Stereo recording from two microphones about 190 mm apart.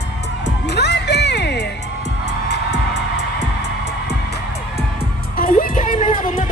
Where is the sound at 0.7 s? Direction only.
65° left (ahead or behind).